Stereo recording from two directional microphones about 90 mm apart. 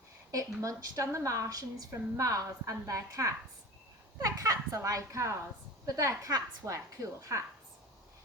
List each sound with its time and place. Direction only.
0.3 s a woman's voice: 40° right (ahead or behind)